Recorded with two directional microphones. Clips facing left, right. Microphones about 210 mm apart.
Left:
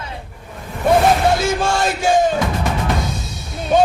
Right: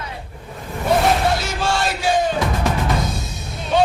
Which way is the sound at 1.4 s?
50° left (ahead or behind).